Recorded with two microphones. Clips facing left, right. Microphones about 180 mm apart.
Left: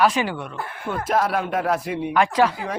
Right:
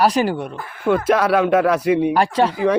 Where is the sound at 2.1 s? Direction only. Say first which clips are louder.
Right 2 dB; 30° right (ahead or behind).